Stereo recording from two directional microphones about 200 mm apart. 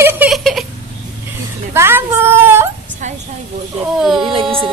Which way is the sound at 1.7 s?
10° right (ahead or behind).